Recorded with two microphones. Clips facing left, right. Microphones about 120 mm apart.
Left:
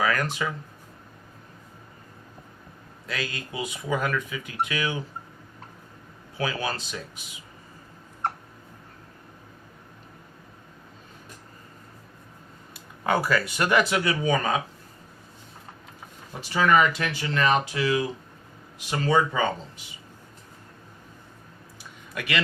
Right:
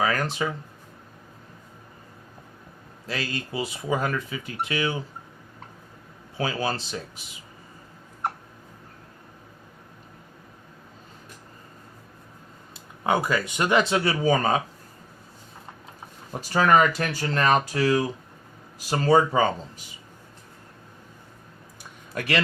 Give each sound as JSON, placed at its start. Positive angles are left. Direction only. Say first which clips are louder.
{"t": 0.0, "sound": "speech", "louder": "right 1 dB", "side_deg": -30}
{"t": 3.1, "sound": "speech", "louder": "right 2 dB", "side_deg": -30}
{"t": 6.3, "sound": "speech", "louder": "right 2 dB", "side_deg": -30}
{"t": 13.1, "sound": "speech", "louder": "even", "side_deg": -20}
{"t": 16.3, "sound": "speech", "louder": "right 2 dB", "side_deg": -45}
{"t": 22.1, "sound": "speech", "louder": "right 4 dB", "side_deg": -40}